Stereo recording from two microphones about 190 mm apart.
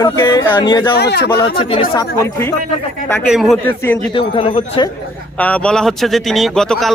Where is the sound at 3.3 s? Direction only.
Centre (ahead or behind).